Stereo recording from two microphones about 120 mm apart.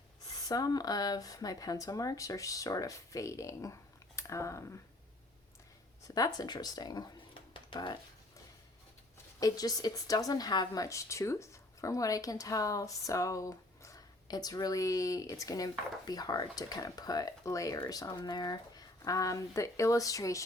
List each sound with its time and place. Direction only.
0.4 s a woman's voice: 30° left (ahead or behind)
6.1 s speech: 30° left (ahead or behind)
7.5 s music: 45° left (ahead or behind)
9.4 s a woman's voice: 30° left (ahead or behind)